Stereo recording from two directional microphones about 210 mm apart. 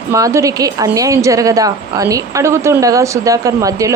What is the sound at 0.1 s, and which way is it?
A woman's voice, 15° right (ahead or behind).